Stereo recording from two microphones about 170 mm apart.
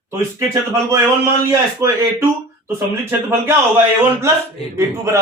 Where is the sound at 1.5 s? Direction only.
15° right (ahead or behind).